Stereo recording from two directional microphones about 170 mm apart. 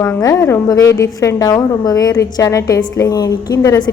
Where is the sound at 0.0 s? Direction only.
15° left (ahead or behind).